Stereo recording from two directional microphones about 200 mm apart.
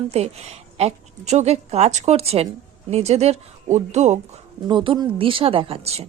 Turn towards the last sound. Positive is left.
turn(degrees=-30)  # may be behind; listen again after turning